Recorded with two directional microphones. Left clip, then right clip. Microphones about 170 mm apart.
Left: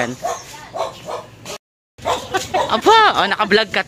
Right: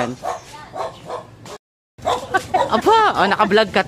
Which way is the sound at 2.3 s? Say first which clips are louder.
Right 1 dB; centre (ahead or behind).